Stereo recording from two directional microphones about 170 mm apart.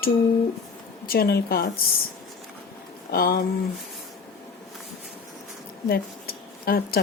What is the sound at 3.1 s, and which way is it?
Speech, 65° left (ahead or behind).